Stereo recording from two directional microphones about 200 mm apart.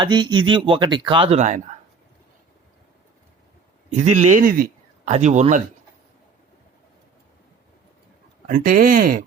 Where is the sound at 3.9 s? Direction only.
35° right (ahead or behind).